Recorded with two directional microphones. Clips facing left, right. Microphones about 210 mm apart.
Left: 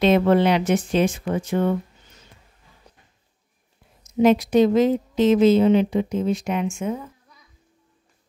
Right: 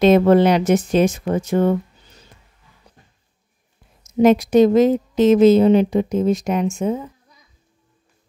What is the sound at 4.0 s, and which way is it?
Speech, 45° right (ahead or behind).